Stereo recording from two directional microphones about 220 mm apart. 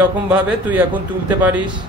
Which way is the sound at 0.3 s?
5° right (ahead or behind).